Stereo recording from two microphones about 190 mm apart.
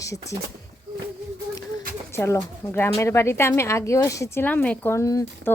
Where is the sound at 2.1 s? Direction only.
15° left (ahead or behind).